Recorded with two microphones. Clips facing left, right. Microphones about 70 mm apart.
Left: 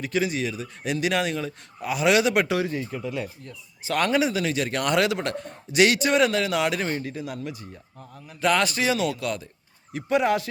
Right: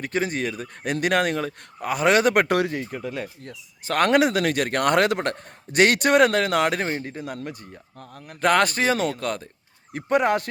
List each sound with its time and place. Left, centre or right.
0.0 s a man's voice: right
3.0 s speech: right
3.8 s a man's voice: right